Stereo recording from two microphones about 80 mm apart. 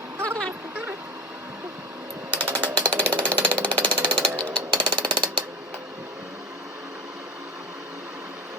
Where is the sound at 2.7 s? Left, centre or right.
Right.